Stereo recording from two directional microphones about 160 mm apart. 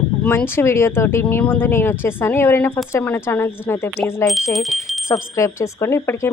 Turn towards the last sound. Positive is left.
turn(degrees=15)  # may be behind; listen again after turning